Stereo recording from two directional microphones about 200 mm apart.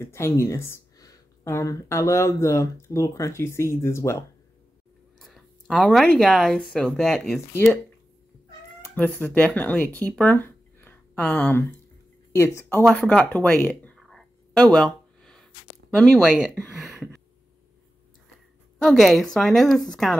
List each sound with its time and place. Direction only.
0.0 s speech: 15° left (ahead or behind)
5.2 s a sound: 5° left (ahead or behind)
6.1 s a woman's voice: centre (ahead or behind)
8.8 s speech: 10° left (ahead or behind)
12.8 s a sound: 5° left (ahead or behind)
16.0 s a woman's voice: 5° left (ahead or behind)
18.9 s a woman's voice: centre (ahead or behind)